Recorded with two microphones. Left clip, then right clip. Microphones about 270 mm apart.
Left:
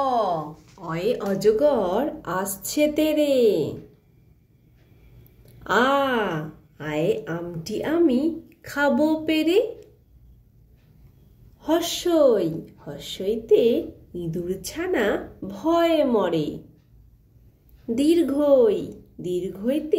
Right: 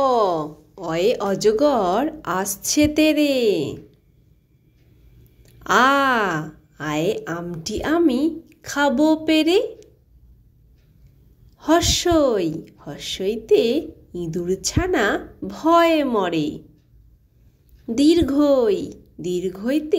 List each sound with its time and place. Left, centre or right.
0.0 s speech: right
2.4 s speech: right
2.7 s a woman's voice: right
5.7 s a woman's voice: right
11.6 s a woman's voice: right
12.8 s speech: right
13.2 s a woman's voice: right
16.3 s speech: right
17.9 s a woman's voice: right